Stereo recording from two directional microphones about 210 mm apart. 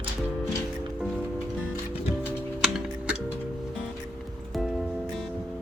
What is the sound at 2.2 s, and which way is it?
Music, 5° right (ahead or behind).